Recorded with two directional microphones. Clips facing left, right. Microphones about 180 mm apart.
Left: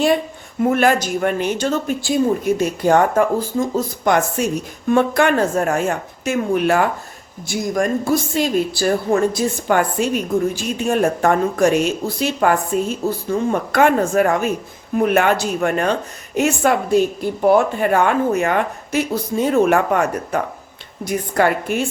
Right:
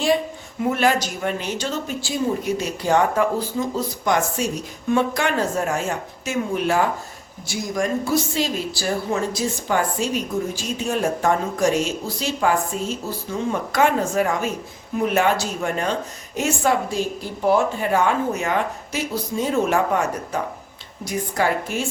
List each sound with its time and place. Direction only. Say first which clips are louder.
0.6 s speech: left 4 dB; 50° left (ahead or behind)